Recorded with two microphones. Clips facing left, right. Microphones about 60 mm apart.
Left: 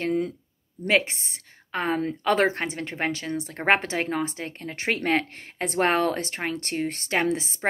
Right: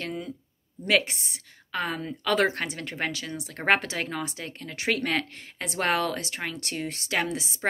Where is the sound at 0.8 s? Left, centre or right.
Left.